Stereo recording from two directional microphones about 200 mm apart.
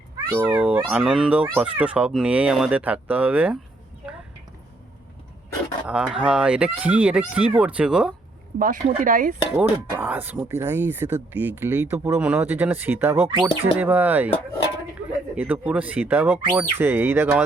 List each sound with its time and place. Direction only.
0.3 s speech: 10° right (ahead or behind)
5.8 s speech: 5° right (ahead or behind)
8.5 s speech: 45° right (ahead or behind)
10.0 s speech: 10° right (ahead or behind)
15.4 s speech: 10° right (ahead or behind)